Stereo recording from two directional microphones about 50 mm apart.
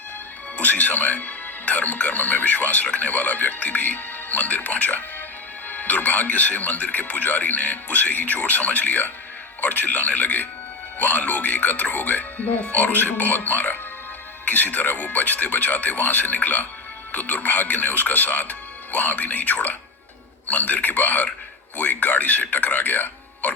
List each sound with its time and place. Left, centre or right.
0.5 s speech: left